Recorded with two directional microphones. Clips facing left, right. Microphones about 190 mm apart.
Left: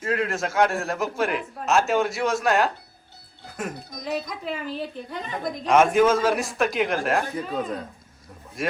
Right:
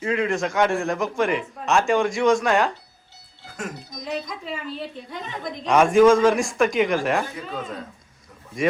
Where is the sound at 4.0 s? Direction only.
5° left (ahead or behind).